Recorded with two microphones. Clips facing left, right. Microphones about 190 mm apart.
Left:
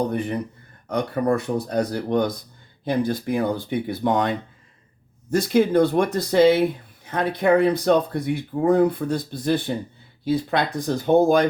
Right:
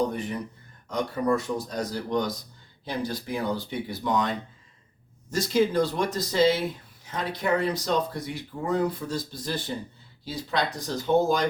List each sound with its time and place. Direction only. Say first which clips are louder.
0.1 s speech: left 6 dB; 60° left (ahead or behind)